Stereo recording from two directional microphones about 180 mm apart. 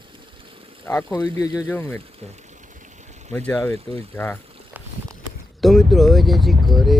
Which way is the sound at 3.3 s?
10° left (ahead or behind).